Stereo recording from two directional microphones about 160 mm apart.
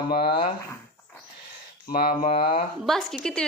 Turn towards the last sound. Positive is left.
turn(degrees=5)  # may be behind; listen again after turning